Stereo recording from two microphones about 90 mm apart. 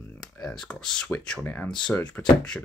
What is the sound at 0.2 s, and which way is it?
Speech, 5° left (ahead or behind).